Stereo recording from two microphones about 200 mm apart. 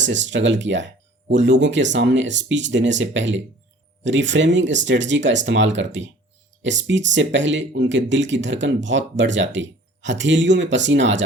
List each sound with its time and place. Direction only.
0.0 s speech: 65° right (ahead or behind)